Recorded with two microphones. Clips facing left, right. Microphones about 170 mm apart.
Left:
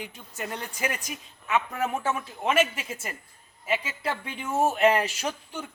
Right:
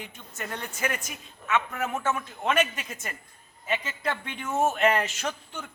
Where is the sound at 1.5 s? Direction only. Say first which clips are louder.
Left 1 dB; 35° left (ahead or behind).